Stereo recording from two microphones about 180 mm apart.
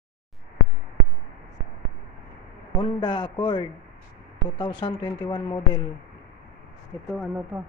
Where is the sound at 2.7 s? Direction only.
25° left (ahead or behind).